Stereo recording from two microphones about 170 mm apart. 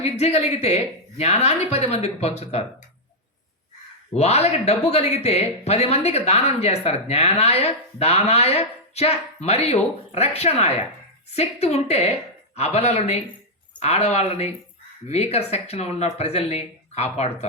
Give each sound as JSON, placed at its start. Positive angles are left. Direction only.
{"t": 0.0, "sound": "speech", "side_deg": 40}
{"t": 4.1, "sound": "speech", "side_deg": 40}